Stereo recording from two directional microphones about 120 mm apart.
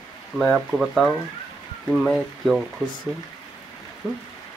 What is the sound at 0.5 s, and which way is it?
Speech, centre (ahead or behind).